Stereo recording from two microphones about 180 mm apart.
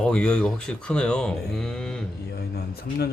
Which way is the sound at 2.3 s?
60° left (ahead or behind).